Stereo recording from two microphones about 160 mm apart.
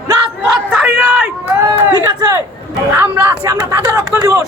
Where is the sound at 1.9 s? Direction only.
20° right (ahead or behind).